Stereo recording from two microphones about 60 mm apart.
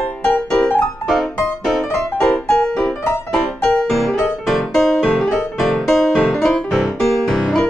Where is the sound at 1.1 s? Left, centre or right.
Centre.